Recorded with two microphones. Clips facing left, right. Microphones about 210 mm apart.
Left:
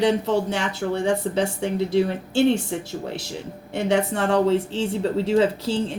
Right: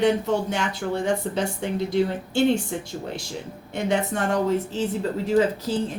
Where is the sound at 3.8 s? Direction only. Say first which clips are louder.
Left 2 dB; 85° left.